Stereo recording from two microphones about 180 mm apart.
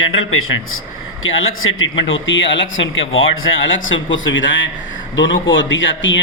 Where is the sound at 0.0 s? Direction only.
90° left.